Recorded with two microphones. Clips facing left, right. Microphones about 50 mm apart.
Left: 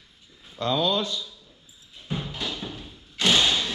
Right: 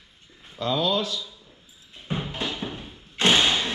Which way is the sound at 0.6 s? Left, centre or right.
Centre.